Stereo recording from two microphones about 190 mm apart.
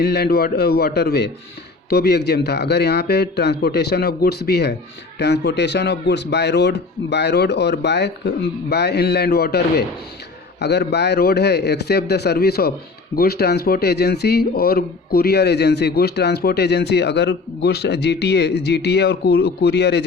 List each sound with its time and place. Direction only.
0.0 s speech: 60° left (ahead or behind)